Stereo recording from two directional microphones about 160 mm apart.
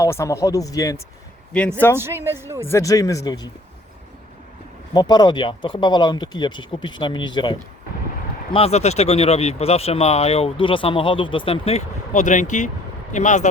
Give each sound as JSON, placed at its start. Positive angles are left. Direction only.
{"t": 0.0, "sound": "speech", "side_deg": 20}
{"t": 2.0, "sound": "speech", "side_deg": -15}
{"t": 2.6, "sound": "speech", "side_deg": 15}
{"t": 4.9, "sound": "speech", "side_deg": 25}
{"t": 8.5, "sound": "speech", "side_deg": 40}